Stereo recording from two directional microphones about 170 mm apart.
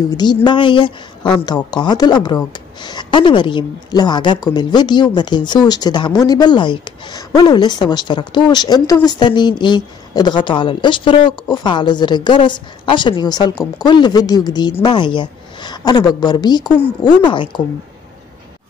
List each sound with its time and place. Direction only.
0.2 s a woman's voice: 25° left (ahead or behind)